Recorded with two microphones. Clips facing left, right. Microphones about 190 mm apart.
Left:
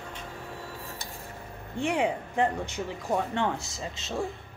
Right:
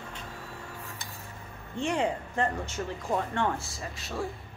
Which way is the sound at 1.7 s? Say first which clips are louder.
Left 1 dB; 10° left (ahead or behind).